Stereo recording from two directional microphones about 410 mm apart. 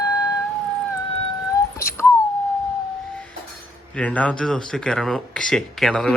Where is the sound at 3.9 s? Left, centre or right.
Centre.